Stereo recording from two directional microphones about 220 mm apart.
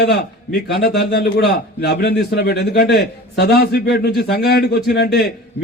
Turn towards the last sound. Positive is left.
turn(degrees=50)  # may be behind; listen again after turning